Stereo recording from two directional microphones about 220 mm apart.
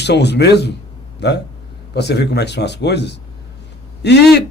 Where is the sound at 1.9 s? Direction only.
50° left (ahead or behind).